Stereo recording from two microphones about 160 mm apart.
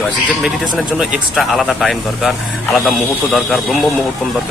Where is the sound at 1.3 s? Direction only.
Centre (ahead or behind).